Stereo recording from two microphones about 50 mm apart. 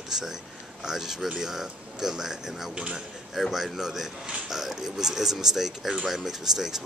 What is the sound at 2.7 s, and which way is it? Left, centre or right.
Speech, right.